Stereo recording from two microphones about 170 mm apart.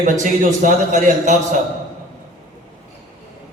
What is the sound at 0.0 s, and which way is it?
A man's voice, 50° right (ahead or behind).